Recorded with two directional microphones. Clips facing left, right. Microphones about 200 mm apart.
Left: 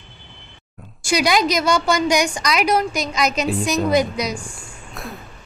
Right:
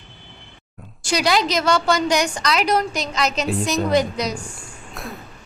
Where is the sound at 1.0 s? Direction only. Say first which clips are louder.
Left 2 dB; 10° left (ahead or behind).